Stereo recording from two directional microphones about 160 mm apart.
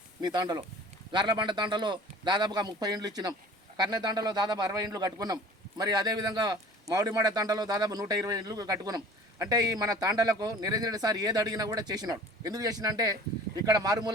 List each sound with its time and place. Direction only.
0.2 s a man's voice: 25° right (ahead or behind)